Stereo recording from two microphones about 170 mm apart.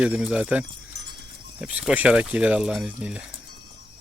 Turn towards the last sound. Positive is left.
turn(degrees=-5)  # may be behind; listen again after turning